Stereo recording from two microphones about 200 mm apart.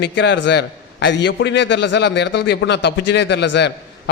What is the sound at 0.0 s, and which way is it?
A man's voice, 60° left (ahead or behind).